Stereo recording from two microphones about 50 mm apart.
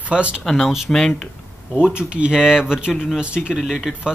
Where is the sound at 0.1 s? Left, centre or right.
Right.